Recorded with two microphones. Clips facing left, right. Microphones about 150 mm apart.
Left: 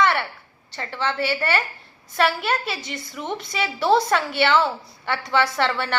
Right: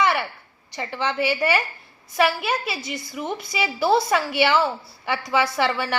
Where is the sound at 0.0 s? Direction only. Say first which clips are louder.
Left 1 dB; 10° right (ahead or behind).